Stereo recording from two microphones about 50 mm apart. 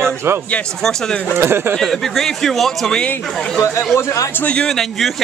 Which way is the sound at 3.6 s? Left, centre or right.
Left.